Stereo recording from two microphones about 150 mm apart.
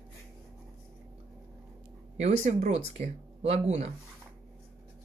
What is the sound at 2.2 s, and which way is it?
A woman's voice, 50° right (ahead or behind).